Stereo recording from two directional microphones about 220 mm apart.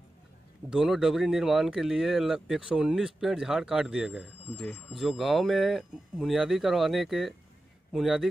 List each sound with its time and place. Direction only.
0.7 s speech: 5° right (ahead or behind)